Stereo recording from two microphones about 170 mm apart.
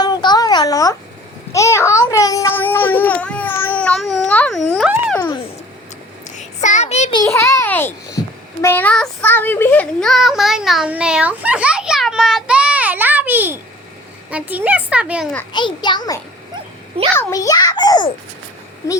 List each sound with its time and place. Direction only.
0.0 s a sound: 25° left (ahead or behind)
1.5 s speech: 15° left (ahead or behind)
6.3 s child singing: 45° left (ahead or behind)
7.3 s speech: 15° left (ahead or behind)
8.6 s child singing: 10° left (ahead or behind); by 13.6 s 10° right (ahead or behind)
14.3 s a child's voice: 10° right (ahead or behind)
15.5 s a child's voice: 25° left (ahead or behind)